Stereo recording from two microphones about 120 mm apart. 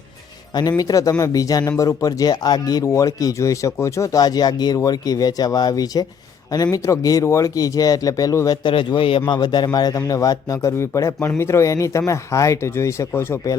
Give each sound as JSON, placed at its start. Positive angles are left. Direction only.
{"t": 0.8, "sound": "speech", "side_deg": 30}
{"t": 8.6, "sound": "speech", "side_deg": 40}